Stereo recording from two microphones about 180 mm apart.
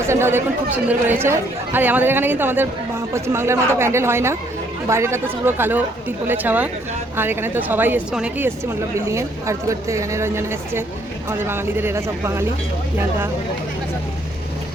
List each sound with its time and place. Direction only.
0.0 s speech: 15° right (ahead or behind)